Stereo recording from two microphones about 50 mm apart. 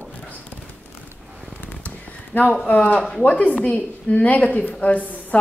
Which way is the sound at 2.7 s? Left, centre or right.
Left.